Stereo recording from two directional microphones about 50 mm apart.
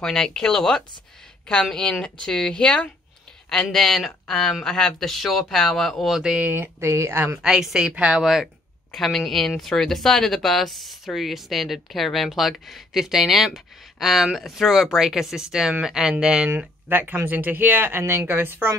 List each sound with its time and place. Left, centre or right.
0.0 s speech: centre
3.7 s speech: centre
6.0 s speech: centre
6.4 s speech: right
6.8 s speech: right
7.4 s speech: centre
7.8 s speech: right
8.2 s speech: centre
8.9 s speech: centre
16.4 s speech: right